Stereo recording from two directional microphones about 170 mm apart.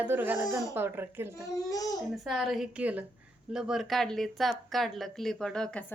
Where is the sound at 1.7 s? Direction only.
20° left (ahead or behind).